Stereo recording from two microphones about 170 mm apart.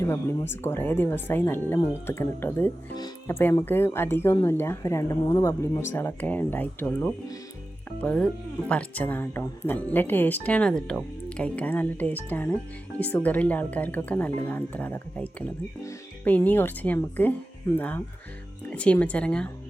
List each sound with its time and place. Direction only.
0.0 s a woman's voice: 15° left (ahead or behind)